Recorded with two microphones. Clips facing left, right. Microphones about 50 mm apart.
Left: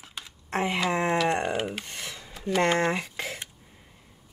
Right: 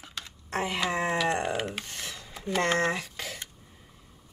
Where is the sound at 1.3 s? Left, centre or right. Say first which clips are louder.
Left 2 dB; centre.